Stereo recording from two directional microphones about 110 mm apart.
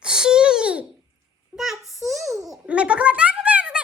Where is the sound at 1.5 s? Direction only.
Centre (ahead or behind).